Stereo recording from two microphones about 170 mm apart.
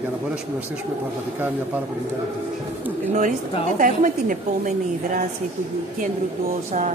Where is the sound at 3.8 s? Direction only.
50° right (ahead or behind).